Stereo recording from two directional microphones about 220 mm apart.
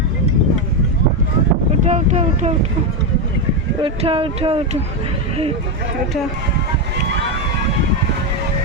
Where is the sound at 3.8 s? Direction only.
25° right (ahead or behind).